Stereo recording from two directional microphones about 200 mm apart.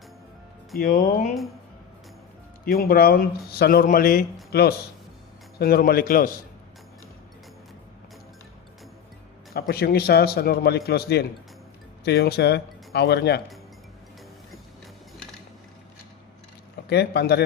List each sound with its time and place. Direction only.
0.8 s a man's voice: 45° left (ahead or behind)
2.6 s a man's voice: 50° left (ahead or behind)
9.6 s a man's voice: 50° left (ahead or behind)
16.9 s speech: 55° left (ahead or behind)